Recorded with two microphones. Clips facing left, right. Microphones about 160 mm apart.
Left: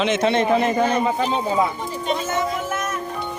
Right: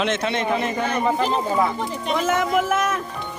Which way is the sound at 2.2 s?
90° right.